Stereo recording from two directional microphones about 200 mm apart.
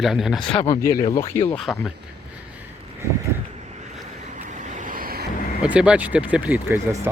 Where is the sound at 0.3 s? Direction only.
25° left (ahead or behind).